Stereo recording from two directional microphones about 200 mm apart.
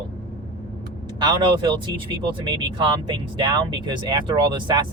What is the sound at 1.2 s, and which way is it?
Speech, 25° right (ahead or behind).